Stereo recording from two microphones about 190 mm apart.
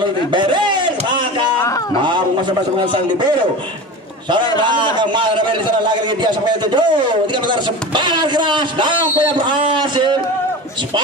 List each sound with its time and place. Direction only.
0.0 s a sound: 25° right (ahead or behind)
2.8 s a man's voice: 25° right (ahead or behind)
4.7 s a man's voice: 25° right (ahead or behind)